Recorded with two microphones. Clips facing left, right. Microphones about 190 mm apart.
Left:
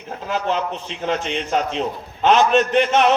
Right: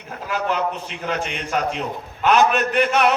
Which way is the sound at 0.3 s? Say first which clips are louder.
Even; 25° left (ahead or behind).